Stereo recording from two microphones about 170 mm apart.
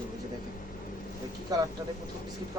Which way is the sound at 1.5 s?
20° right (ahead or behind).